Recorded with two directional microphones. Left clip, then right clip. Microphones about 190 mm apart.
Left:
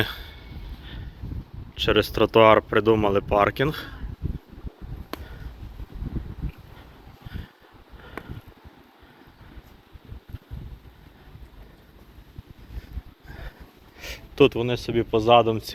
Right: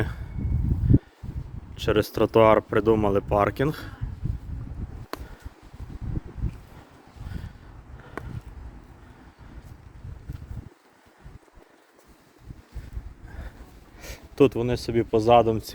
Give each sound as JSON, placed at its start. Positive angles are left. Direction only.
{"t": 0.0, "sound": "a sound", "side_deg": -5}
{"t": 1.7, "sound": "speech", "side_deg": -10}
{"t": 14.0, "sound": "speech", "side_deg": -10}